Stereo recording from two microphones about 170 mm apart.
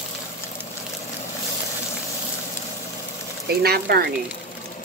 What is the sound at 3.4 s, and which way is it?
Speech, 65° right (ahead or behind).